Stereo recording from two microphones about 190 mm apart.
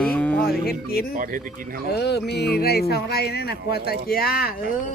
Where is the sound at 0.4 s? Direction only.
55° left (ahead or behind).